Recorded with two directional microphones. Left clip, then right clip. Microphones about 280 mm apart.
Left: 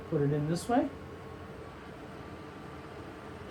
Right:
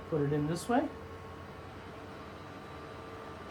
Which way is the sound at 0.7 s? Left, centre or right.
Centre.